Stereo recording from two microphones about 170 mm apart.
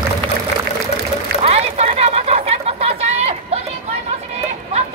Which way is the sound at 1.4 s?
40° right (ahead or behind).